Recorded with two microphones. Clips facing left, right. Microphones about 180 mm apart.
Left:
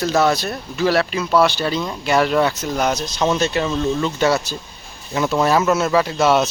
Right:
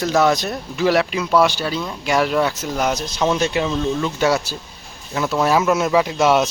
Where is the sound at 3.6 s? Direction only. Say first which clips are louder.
Left 1 dB; centre (ahead or behind).